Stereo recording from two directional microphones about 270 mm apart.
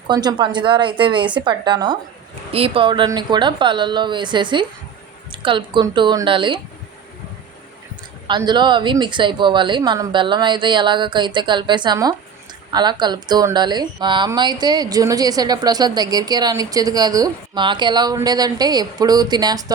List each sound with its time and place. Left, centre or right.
0.1 s speech: centre
8.3 s speech: centre